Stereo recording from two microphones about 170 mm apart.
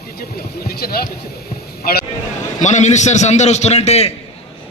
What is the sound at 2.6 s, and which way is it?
A man's voice, 45° left (ahead or behind).